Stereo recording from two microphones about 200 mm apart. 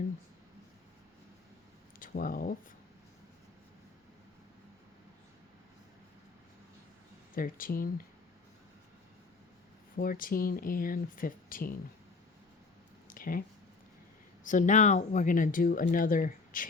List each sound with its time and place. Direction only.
2.0 s speech: 45° left (ahead or behind)
7.3 s speech: 45° left (ahead or behind)
10.0 s speech: 45° left (ahead or behind)
13.1 s a sound: 45° left (ahead or behind)
14.4 s speech: 40° left (ahead or behind)